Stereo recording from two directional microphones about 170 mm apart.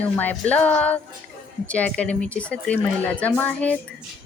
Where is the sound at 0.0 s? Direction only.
10° left (ahead or behind).